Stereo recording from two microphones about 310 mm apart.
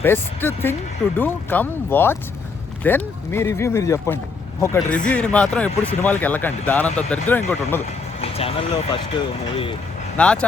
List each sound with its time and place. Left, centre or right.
0.0 s speech: centre
8.2 s speech: centre
10.2 s speech: centre